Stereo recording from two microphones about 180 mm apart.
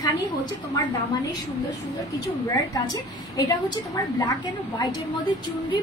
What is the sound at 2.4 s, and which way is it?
A woman's voice, 20° left (ahead or behind).